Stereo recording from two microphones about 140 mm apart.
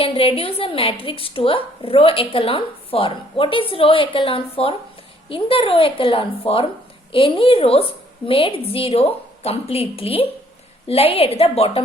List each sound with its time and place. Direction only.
0.0 s a woman's voice: 40° left (ahead or behind)